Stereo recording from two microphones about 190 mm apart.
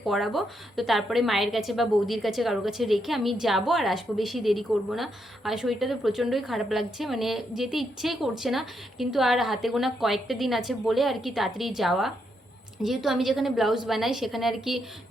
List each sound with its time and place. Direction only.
0.1 s a woman's voice: centre (ahead or behind)